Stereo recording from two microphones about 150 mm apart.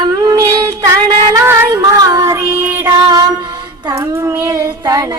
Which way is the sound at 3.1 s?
25° right (ahead or behind).